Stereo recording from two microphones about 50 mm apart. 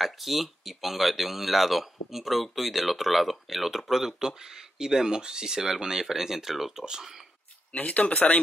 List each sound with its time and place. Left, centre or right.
0.0 s speech: centre
7.7 s speech: left